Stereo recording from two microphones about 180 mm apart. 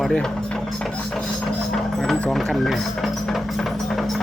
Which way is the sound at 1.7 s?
Centre (ahead or behind).